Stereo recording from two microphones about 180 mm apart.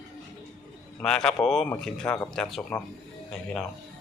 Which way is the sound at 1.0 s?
5° left (ahead or behind).